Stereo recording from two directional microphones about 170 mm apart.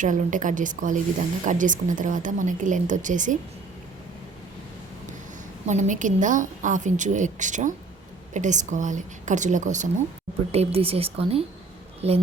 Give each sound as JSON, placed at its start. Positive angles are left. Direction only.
{"t": 0.0, "sound": "a woman's voice", "side_deg": -50}
{"t": 5.6, "sound": "a woman's voice", "side_deg": -45}
{"t": 10.5, "sound": "speech", "side_deg": -35}